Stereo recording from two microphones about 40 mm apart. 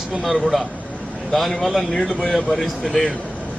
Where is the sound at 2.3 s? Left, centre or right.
Centre.